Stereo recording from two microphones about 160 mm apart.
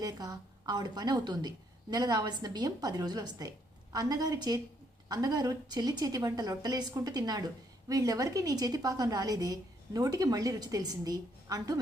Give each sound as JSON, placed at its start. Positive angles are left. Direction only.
{"t": 0.0, "sound": "a woman's voice", "side_deg": -25}